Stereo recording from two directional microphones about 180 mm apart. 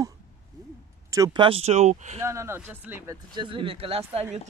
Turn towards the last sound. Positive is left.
turn(degrees=-35)  # may be behind; listen again after turning